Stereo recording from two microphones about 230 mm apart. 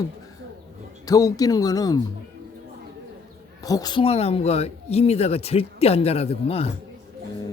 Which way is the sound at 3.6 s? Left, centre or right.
Centre.